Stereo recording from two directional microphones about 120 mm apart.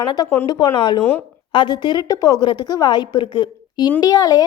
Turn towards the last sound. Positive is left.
turn(degrees=30)  # may be behind; listen again after turning